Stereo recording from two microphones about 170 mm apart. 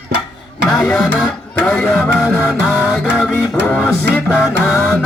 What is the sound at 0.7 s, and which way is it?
Music, centre (ahead or behind).